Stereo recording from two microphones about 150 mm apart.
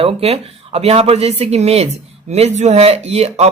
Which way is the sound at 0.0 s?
45° right (ahead or behind).